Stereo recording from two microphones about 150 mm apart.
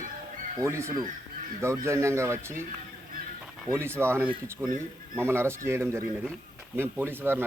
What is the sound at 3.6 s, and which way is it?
Speech, 15° right (ahead or behind).